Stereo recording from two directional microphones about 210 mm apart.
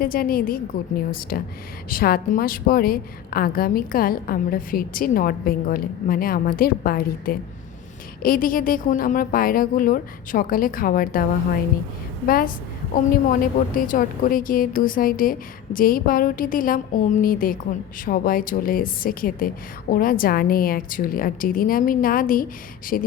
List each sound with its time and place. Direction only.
0.0 s a woman's voice: 45° left (ahead or behind)
12.3 s a woman's voice: 45° left (ahead or behind)
13.7 s a woman's voice: 40° left (ahead or behind)